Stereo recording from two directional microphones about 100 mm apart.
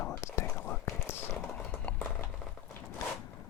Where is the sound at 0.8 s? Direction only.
25° left (ahead or behind).